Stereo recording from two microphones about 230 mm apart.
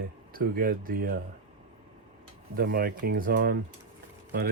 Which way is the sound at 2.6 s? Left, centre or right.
Right.